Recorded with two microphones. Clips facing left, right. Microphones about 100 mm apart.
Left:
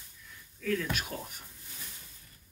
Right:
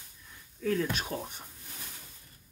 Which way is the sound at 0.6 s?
30° right (ahead or behind).